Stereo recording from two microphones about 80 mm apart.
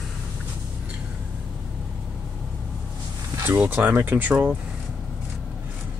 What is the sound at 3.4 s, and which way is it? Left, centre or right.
Speech, right.